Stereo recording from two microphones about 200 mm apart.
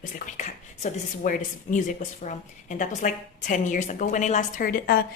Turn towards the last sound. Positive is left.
turn(degrees=45)  # may be behind; listen again after turning